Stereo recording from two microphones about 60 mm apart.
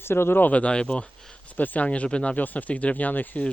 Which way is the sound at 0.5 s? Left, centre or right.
Centre.